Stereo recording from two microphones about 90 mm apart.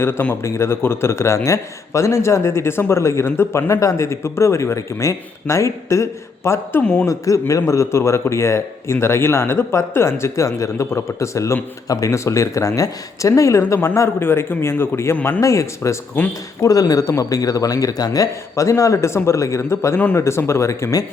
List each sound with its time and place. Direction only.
0.0 s a man's voice: 25° left (ahead or behind)
6.8 s speech: 10° left (ahead or behind)
7.1 s a man's voice: 35° left (ahead or behind)
15.4 s a man's voice: 35° left (ahead or behind)